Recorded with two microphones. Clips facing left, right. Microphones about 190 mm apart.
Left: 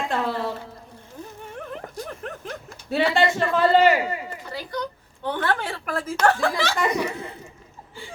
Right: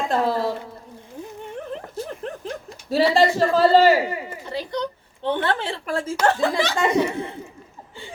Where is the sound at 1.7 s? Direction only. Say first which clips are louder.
Right 3 dB; 30° right (ahead or behind).